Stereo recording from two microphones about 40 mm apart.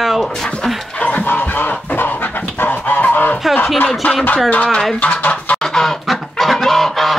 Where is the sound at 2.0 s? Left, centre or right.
Left.